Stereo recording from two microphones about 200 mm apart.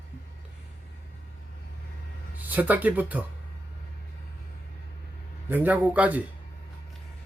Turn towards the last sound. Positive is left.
turn(degrees=-10)  # may be behind; listen again after turning